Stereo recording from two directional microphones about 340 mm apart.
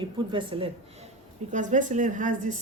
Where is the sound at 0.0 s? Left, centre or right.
Centre.